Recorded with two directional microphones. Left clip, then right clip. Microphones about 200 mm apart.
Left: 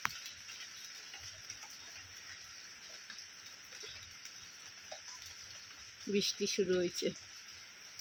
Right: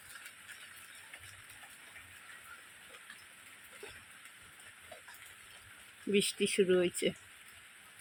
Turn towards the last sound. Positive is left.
turn(degrees=-15)  # may be behind; listen again after turning